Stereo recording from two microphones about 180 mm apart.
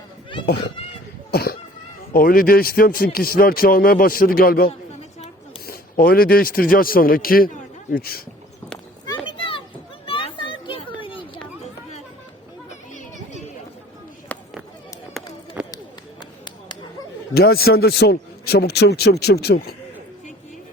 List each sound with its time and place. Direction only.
1.3 s a sound: 60° left (ahead or behind)
2.1 s a man's voice: 55° left (ahead or behind)
9.0 s a sound: 30° left (ahead or behind)
10.1 s children playing: 30° left (ahead or behind)
12.9 s children playing: 45° left (ahead or behind)
14.3 s chop: 10° left (ahead or behind)
15.6 s run: 10° right (ahead or behind)
17.3 s a man's voice: 60° left (ahead or behind)